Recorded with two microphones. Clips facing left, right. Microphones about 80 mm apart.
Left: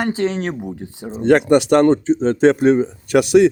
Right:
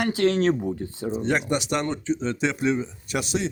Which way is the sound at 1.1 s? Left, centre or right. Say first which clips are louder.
Left 12 dB; left.